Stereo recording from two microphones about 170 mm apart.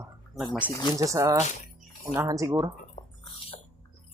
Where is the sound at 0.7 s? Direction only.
20° left (ahead or behind).